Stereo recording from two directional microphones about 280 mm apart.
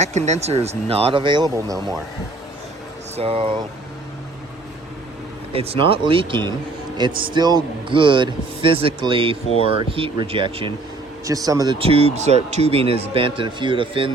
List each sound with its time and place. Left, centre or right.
0.0 s speech: right
3.2 s speech: centre
5.5 s a man's voice: centre